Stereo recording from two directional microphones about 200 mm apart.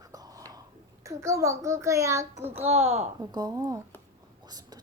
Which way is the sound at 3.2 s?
20° right (ahead or behind).